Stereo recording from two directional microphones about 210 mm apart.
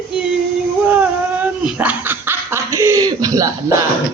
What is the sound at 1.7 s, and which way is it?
Chuckle, 5° right (ahead or behind).